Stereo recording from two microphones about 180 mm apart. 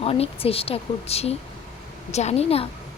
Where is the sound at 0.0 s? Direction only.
30° left (ahead or behind).